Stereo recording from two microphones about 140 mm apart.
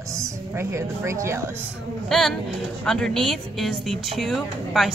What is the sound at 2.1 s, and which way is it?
A woman's voice, centre (ahead or behind).